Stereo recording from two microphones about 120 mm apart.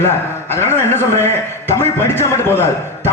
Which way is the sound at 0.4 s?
20° left (ahead or behind).